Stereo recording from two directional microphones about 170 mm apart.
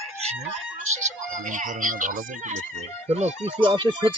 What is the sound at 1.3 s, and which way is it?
Speech, 50° right (ahead or behind).